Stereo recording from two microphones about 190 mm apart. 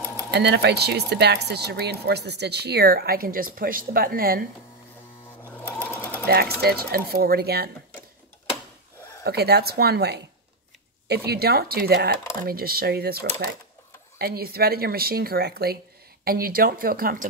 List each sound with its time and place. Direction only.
0.3 s speech: 60° right (ahead or behind)
5.4 s sewing machine: 10° left (ahead or behind)
6.2 s speech: 55° right (ahead or behind)
9.2 s speech: 60° right (ahead or behind)